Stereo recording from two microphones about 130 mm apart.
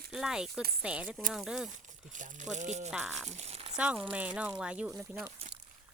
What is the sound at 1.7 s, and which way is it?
Speech, 70° right (ahead or behind).